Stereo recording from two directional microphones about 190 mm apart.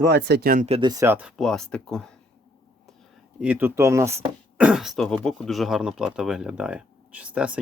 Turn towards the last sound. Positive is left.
turn(degrees=-5)  # may be behind; listen again after turning